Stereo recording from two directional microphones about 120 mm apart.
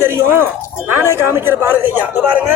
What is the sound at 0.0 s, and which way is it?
A woman's voice, 20° right (ahead or behind).